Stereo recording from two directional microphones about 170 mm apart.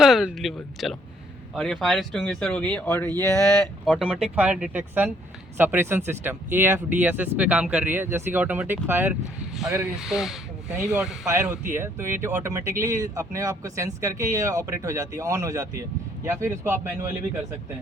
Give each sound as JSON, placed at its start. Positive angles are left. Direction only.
{"t": 0.0, "sound": "speech", "side_deg": 0}
{"t": 3.9, "sound": "speech", "side_deg": 0}